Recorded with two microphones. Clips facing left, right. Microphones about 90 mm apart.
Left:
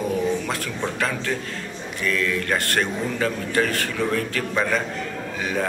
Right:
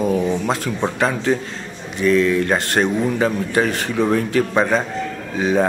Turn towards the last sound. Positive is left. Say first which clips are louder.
# right 7 dB
turn(degrees=-25)  # may be behind; listen again after turning